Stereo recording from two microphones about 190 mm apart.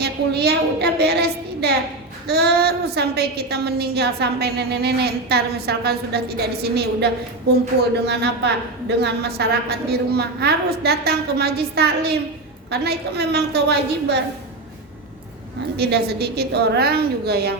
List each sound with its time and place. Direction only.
0.0 s a woman's voice: 60° right (ahead or behind)
15.8 s a woman's voice: 60° right (ahead or behind)